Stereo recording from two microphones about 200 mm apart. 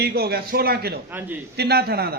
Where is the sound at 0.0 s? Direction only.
50° right (ahead or behind).